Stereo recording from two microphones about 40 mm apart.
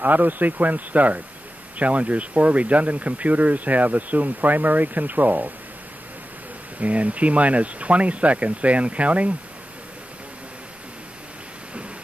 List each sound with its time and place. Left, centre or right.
0.0 s speech: right
6.8 s speech: right